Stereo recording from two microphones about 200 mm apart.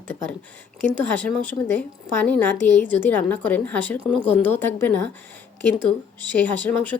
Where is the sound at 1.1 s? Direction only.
10° left (ahead or behind).